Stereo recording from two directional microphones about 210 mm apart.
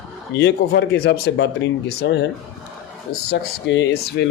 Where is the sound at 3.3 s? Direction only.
55° left (ahead or behind).